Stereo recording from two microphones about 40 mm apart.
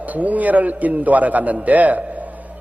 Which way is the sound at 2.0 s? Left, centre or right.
Right.